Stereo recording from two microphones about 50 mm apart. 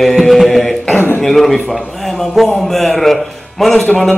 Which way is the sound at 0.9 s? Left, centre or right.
Left.